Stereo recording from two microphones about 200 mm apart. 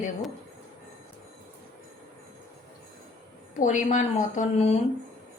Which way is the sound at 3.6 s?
40° left (ahead or behind).